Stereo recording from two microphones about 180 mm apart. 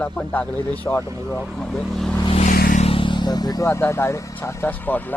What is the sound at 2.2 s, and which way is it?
Vehicle, 35° left (ahead or behind).